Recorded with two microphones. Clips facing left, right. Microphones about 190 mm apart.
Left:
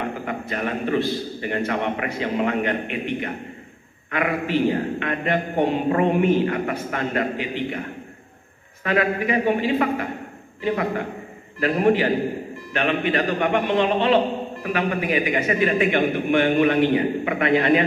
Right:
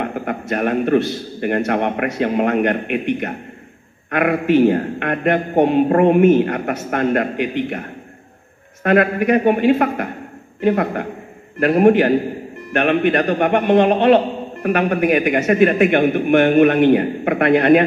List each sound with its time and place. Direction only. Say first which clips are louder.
0.0 s a man's voice: right 4 dB; 60° right (ahead or behind)
13.2 s a man's voice: right 5 dB; 50° right (ahead or behind)